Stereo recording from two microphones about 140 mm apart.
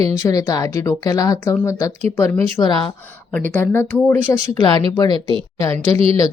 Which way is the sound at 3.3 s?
10° left (ahead or behind).